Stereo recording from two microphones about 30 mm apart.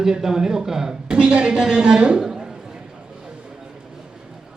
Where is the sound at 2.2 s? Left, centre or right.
Right.